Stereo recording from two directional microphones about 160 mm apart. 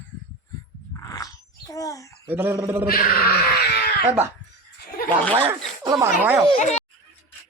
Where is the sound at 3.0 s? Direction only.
70° left (ahead or behind).